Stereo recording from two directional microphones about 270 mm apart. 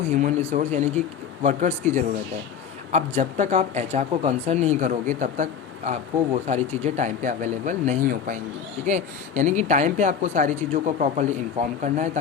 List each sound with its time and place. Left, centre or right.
0.1 s speech: right
2.9 s speech: right